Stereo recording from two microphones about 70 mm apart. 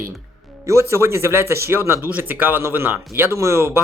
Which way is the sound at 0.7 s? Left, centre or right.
Right.